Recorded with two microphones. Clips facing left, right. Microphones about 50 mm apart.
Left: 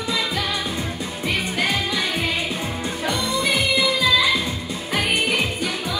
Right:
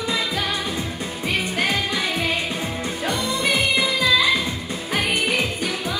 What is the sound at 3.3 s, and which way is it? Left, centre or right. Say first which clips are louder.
Music: even; right.